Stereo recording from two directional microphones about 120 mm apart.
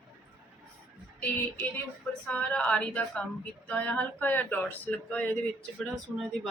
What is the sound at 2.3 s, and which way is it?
Speech, 10° left (ahead or behind).